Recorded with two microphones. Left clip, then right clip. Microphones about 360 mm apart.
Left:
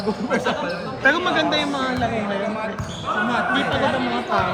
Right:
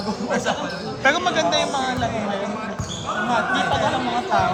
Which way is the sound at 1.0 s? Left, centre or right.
Centre.